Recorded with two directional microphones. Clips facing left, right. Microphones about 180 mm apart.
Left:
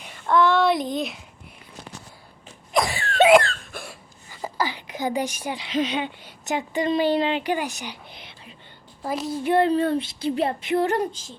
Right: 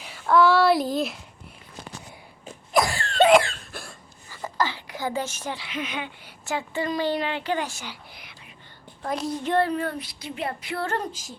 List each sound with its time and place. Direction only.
0.0 s speech: 5° right (ahead or behind)
2.7 s a sound: centre (ahead or behind)
3.7 s cough: centre (ahead or behind)
4.3 s a sound: 15° left (ahead or behind)
5.6 s a woman's voice: 30° left (ahead or behind)
9.0 s speech: 5° left (ahead or behind)
9.6 s speech: 30° left (ahead or behind)
11.1 s speech: 10° right (ahead or behind)